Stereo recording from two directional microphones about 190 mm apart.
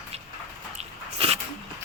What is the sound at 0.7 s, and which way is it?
Biting, 30° right (ahead or behind).